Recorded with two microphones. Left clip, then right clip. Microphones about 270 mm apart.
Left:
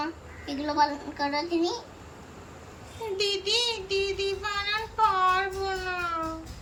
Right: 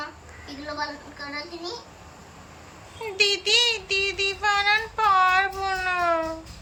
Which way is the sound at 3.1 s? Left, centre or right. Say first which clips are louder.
Right 6 dB; centre.